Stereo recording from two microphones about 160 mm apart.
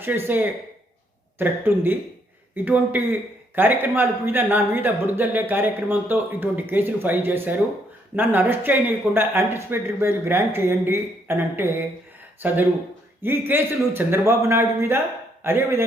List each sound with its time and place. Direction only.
0.0 s a man's voice: 10° right (ahead or behind)